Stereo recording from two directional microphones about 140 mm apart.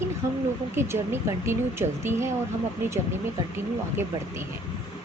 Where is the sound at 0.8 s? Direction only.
15° right (ahead or behind).